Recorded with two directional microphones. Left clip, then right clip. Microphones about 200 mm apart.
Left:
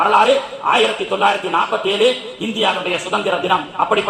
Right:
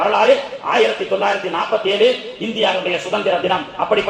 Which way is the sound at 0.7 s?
20° left (ahead or behind).